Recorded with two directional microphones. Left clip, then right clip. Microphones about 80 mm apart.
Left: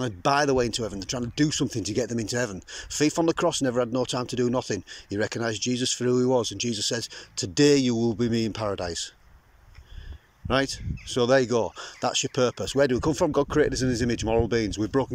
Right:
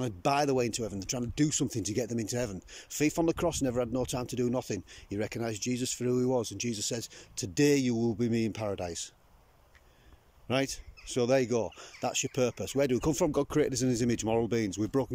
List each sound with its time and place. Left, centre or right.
0.0 s speech: right
10.5 s speech: right